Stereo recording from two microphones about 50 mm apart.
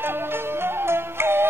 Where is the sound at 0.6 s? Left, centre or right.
Right.